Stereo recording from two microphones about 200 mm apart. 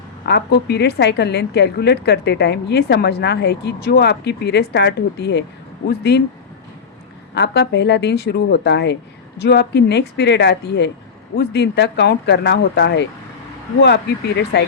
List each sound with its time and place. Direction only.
0.3 s a woman's voice: 55° left (ahead or behind)
7.3 s a woman's voice: 55° left (ahead or behind)